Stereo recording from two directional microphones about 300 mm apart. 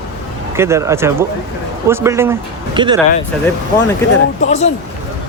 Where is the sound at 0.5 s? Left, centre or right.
Centre.